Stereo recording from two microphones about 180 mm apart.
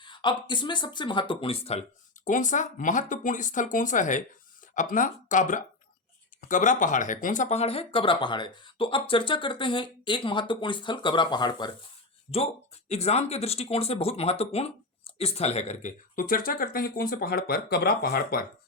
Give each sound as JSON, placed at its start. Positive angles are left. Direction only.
{"t": 0.0, "sound": "speech", "side_deg": 25}
{"t": 2.2, "sound": "speech", "side_deg": 45}
{"t": 12.3, "sound": "speech", "side_deg": 35}
{"t": 16.1, "sound": "speech", "side_deg": 50}